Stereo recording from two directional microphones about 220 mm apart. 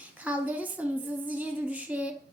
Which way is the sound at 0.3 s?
5° right (ahead or behind).